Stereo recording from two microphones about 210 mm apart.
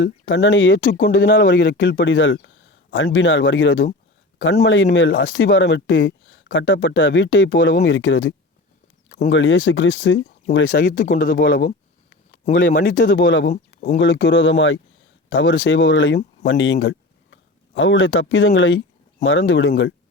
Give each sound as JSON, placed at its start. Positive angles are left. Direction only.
{"t": 0.0, "sound": "speech", "side_deg": 60}
{"t": 9.0, "sound": "a sound", "side_deg": 35}
{"t": 9.3, "sound": "speech", "side_deg": 65}
{"t": 10.7, "sound": "speech", "side_deg": 40}
{"t": 12.6, "sound": "speech", "side_deg": 45}
{"t": 13.1, "sound": "speech", "side_deg": 60}
{"t": 13.5, "sound": "speech", "side_deg": 35}
{"t": 14.0, "sound": "speech", "side_deg": 60}